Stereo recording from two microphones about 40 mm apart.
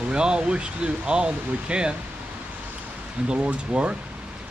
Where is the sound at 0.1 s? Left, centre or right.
Right.